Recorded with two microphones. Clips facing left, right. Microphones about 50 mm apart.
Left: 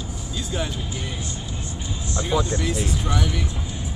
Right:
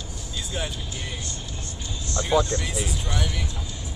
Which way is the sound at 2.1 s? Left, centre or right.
Centre.